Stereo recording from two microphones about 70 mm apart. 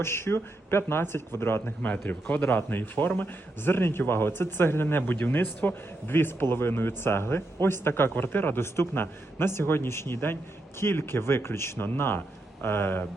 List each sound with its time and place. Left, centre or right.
0.0 s speech: left